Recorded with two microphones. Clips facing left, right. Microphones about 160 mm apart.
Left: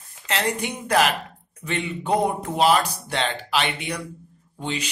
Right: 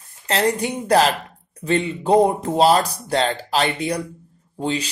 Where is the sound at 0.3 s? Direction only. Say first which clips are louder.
Right 5 dB; 35° right (ahead or behind).